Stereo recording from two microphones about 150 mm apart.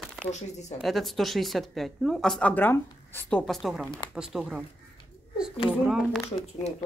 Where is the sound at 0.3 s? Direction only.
50° left (ahead or behind).